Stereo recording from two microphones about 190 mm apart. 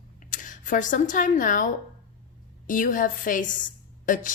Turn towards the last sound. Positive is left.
turn(degrees=40)  # may be behind; listen again after turning